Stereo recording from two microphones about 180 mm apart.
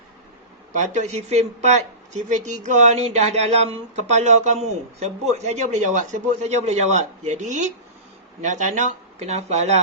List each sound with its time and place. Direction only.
0.7 s speech: 40° right (ahead or behind)